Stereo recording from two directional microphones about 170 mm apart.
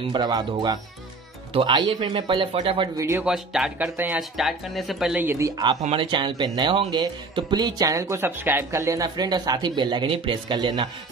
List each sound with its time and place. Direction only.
0.0 s speech: 25° right (ahead or behind)
3.0 s speech: 15° right (ahead or behind)
3.3 s speech: 5° right (ahead or behind)
5.8 s speech: 35° right (ahead or behind)